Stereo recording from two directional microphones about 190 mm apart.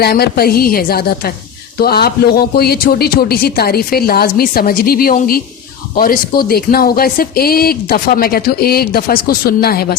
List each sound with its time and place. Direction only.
0.0 s speech: 55° left (ahead or behind)